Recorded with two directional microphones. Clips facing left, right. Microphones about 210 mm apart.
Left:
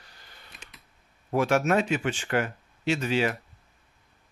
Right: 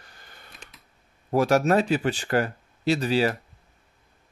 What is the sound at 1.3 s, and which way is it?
Speech, 35° right (ahead or behind).